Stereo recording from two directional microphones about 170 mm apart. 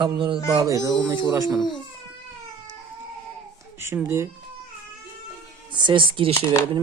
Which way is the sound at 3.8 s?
15° right (ahead or behind).